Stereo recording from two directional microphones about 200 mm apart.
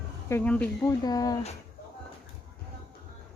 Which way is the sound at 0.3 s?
10° left (ahead or behind).